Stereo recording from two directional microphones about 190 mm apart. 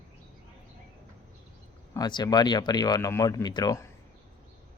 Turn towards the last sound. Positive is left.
turn(degrees=15)  # may be behind; listen again after turning